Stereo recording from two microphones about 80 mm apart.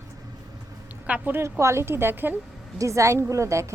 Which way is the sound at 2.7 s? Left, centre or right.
Right.